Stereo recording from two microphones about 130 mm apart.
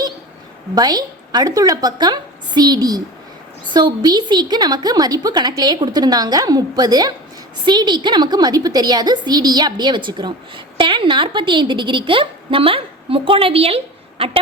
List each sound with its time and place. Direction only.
0.8 s a woman's voice: 30° right (ahead or behind); by 14.3 s 50° right (ahead or behind)